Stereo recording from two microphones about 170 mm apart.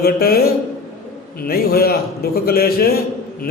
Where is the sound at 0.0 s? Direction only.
65° left (ahead or behind).